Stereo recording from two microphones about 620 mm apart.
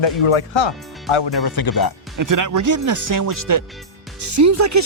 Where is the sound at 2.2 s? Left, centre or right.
Right.